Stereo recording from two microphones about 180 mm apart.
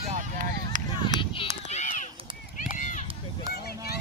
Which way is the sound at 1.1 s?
45° right (ahead or behind).